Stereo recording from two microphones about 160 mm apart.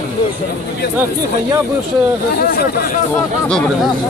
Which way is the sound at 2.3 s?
70° left (ahead or behind).